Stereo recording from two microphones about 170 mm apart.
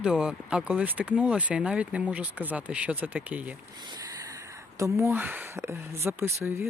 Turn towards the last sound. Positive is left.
turn(degrees=-15)  # may be behind; listen again after turning